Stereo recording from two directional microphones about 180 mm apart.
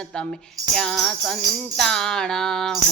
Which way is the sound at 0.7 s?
5° left (ahead or behind).